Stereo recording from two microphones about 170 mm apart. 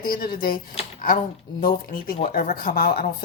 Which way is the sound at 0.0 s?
60° left (ahead or behind).